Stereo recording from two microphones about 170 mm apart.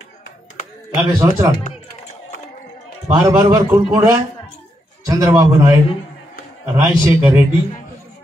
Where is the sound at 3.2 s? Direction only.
20° right (ahead or behind).